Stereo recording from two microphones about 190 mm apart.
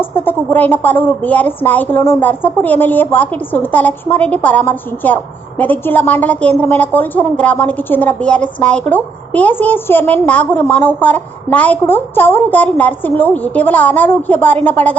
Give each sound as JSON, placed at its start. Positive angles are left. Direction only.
{"t": 0.0, "sound": "a woman's voice", "side_deg": 10}